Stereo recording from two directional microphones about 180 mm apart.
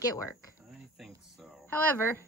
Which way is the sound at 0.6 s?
Centre (ahead or behind).